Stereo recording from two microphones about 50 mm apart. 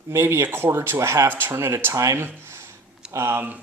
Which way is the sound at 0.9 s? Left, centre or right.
Right.